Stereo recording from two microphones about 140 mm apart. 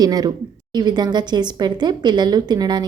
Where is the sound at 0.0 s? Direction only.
30° right (ahead or behind).